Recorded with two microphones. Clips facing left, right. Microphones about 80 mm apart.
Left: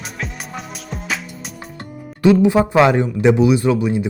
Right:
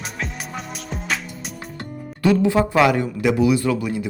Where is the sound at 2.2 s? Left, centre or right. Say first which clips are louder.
Left 4 dB; centre.